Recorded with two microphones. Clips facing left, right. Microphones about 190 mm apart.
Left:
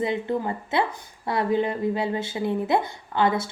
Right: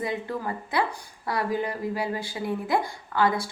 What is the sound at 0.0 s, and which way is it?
A woman's voice, 25° left (ahead or behind).